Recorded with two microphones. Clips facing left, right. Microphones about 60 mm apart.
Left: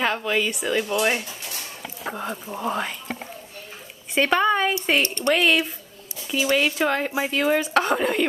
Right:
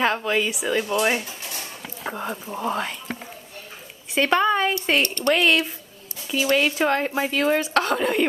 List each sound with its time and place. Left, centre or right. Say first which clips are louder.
0.0 s speech: right 1 dB; centre
2.0 s speech: right 1 dB; centre
4.1 s a woman's voice: even; centre
5.0 s speech: right 1 dB; left
5.3 s speech: even; centre